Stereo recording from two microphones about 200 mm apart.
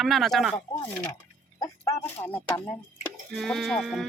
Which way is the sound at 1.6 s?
10° left (ahead or behind).